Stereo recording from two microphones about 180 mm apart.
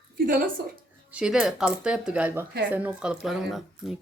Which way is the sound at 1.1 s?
5° right (ahead or behind).